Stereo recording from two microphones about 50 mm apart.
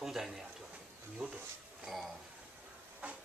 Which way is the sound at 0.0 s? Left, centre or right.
Centre.